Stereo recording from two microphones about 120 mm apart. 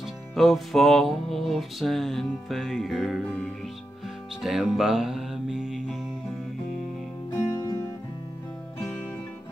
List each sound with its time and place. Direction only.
0.4 s music: centre (ahead or behind)
4.4 s music: 5° right (ahead or behind)
7.3 s music: 30° left (ahead or behind)